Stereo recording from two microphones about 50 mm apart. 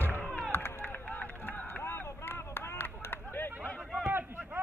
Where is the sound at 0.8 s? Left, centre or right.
Left.